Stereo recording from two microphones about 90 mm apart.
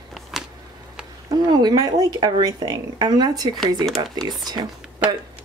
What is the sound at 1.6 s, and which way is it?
Speech, 45° right (ahead or behind).